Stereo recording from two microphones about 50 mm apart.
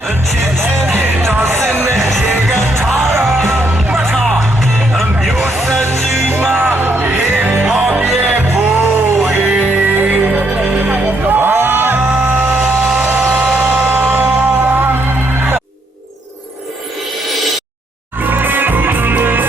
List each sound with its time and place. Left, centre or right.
0.6 s music: right
4.9 s music: centre
5.8 s music: right
9.4 s music: right
10.5 s music: centre
11.3 s music: right
13.3 s a sound: right
13.8 s music: right
18.2 s music: right